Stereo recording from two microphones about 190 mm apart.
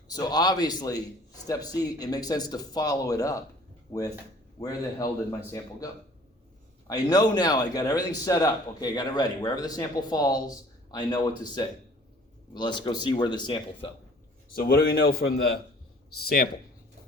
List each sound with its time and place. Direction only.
0.1 s a man's voice: 20° left (ahead or behind)
4.6 s a man's voice: 20° left (ahead or behind)
14.5 s a man's voice: 50° left (ahead or behind)
16.2 s a man's voice: 55° left (ahead or behind)